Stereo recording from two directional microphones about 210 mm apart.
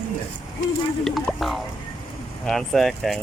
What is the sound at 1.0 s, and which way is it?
Speech, centre (ahead or behind).